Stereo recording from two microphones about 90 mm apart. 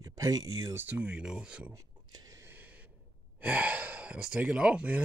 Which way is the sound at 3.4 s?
15° right (ahead or behind).